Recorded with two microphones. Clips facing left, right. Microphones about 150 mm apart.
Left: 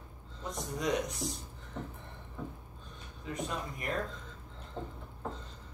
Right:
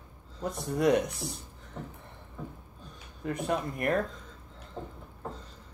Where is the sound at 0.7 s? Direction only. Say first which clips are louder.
Right 8 dB; 60° right (ahead or behind).